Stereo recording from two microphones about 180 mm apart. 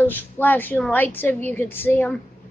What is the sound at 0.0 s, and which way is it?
A woman's voice, 10° left (ahead or behind).